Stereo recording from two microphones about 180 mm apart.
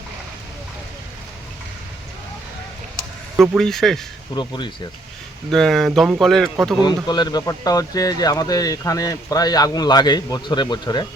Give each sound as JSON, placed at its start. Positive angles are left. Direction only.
{"t": 3.3, "sound": "speech", "side_deg": -10}
{"t": 3.6, "sound": "speech", "side_deg": 0}
{"t": 4.4, "sound": "a man's voice", "side_deg": 25}
{"t": 5.5, "sound": "speech", "side_deg": 0}
{"t": 6.8, "sound": "a man's voice", "side_deg": 25}